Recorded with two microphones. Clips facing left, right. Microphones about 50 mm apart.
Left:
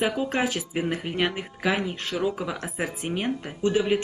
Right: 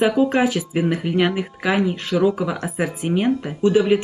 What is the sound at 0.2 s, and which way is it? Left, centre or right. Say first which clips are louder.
Speech: right 8 dB; right.